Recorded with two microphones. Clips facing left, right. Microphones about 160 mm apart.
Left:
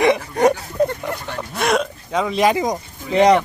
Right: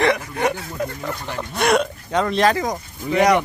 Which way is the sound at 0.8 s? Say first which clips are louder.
Left 9 dB; 30° left (ahead or behind).